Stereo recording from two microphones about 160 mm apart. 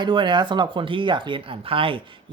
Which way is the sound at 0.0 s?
30° right (ahead or behind).